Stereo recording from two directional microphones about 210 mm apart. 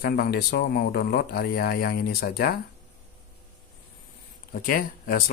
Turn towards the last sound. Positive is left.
turn(degrees=45)  # may be behind; listen again after turning